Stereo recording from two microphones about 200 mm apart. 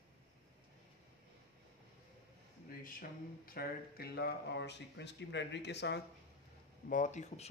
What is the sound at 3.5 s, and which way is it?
Speech, 50° left (ahead or behind).